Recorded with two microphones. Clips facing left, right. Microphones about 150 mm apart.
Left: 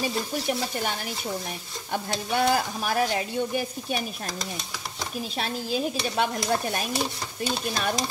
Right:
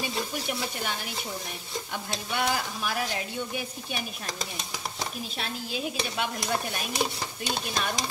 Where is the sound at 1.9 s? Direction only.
40° left (ahead or behind).